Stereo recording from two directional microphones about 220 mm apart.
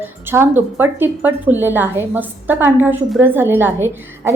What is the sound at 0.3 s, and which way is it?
A woman's voice, 10° right (ahead or behind).